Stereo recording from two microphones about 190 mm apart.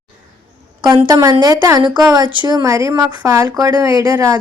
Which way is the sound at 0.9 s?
20° right (ahead or behind).